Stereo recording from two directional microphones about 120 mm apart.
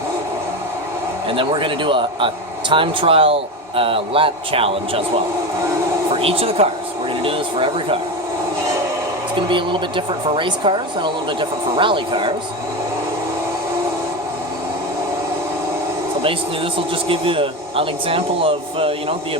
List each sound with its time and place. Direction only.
1.4 s speech: 45° right (ahead or behind)
9.3 s speech: 45° right (ahead or behind)
16.7 s speech: 50° right (ahead or behind)